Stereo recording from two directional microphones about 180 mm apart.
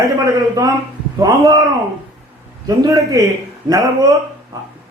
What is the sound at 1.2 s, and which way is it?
Speech, 20° right (ahead or behind).